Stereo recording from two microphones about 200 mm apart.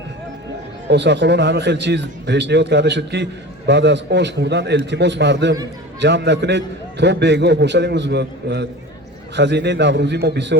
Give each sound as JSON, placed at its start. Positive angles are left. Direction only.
{"t": 0.9, "sound": "a man's voice", "side_deg": -60}